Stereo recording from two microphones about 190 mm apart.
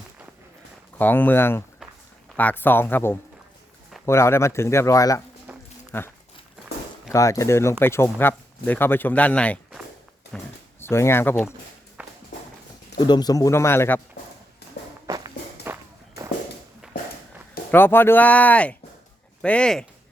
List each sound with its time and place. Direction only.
0.9 s speech: 10° left (ahead or behind)
5.5 s a sound: 5° right (ahead or behind)
5.9 s speech: 10° left (ahead or behind)
7.1 s speech: 15° left (ahead or behind)
12.0 s walk: 10° right (ahead or behind)
13.1 s speech: 20° left (ahead or behind)
15.0 s walk: 20° right (ahead or behind)
17.7 s speech: 10° left (ahead or behind)